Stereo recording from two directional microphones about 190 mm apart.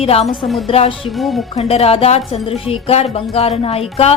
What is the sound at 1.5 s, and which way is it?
Speech, 30° left (ahead or behind).